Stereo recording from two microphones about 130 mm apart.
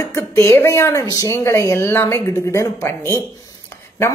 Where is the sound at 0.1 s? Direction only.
20° left (ahead or behind).